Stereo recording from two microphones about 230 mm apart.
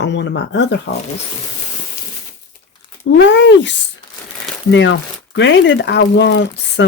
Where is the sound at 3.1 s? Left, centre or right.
Left.